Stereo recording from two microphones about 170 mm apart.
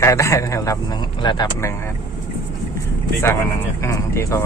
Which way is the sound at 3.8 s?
15° left (ahead or behind).